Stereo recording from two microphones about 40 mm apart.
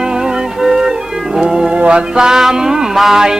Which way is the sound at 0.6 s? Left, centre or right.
Centre.